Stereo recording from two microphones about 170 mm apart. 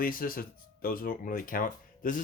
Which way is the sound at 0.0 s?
55° left (ahead or behind).